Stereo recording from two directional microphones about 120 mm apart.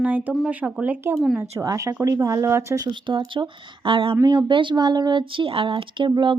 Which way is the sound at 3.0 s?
40° right (ahead or behind).